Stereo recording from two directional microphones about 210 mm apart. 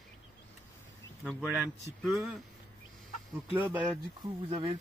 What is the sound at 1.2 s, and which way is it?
Speech, 5° right (ahead or behind).